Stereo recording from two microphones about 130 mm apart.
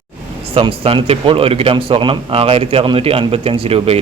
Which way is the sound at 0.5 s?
45° right (ahead or behind).